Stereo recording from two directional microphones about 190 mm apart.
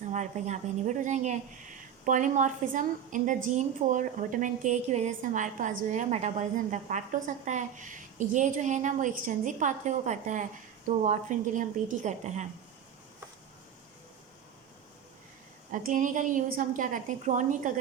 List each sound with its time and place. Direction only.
0.0 s a woman's voice: 40° right (ahead or behind)
15.7 s a woman's voice: 40° right (ahead or behind)